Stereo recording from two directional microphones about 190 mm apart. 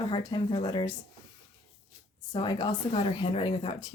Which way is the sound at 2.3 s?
25° left (ahead or behind).